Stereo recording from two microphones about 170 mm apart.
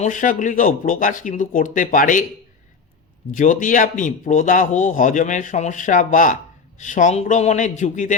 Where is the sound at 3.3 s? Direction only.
50° left (ahead or behind).